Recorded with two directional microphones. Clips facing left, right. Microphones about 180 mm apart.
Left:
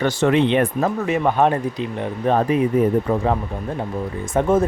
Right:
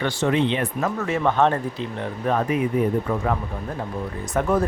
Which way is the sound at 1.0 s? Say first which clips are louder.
Left 1 dB; 15° left (ahead or behind).